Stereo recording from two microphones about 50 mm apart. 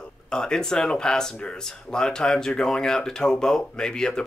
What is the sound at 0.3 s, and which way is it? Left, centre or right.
Speech, centre.